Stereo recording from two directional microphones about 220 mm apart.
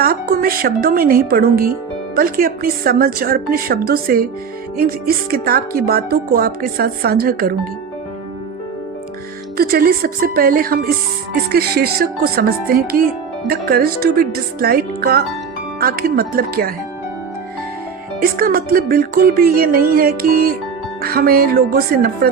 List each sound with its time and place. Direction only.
0.0 s a woman's voice: 40° right (ahead or behind)
9.6 s a woman's voice: 45° right (ahead or behind)
18.2 s speech: 40° right (ahead or behind)